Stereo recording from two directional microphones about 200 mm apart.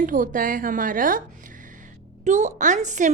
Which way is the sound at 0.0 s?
40° right (ahead or behind).